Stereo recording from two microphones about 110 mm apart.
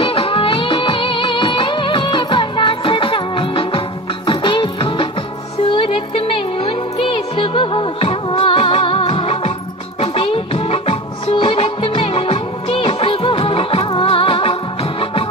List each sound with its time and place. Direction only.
0.0 s music: 55° left (ahead or behind)